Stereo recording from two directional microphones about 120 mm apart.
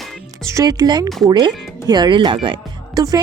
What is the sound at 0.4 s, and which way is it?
Speech, 30° right (ahead or behind).